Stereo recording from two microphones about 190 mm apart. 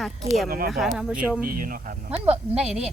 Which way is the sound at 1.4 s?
45° right (ahead or behind).